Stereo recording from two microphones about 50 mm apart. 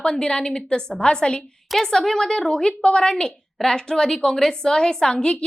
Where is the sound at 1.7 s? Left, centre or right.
Centre.